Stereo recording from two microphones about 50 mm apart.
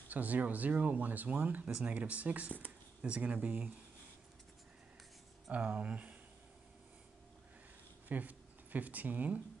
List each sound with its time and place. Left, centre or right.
0.1 s speech: right
5.5 s speech: right
8.1 s speech: right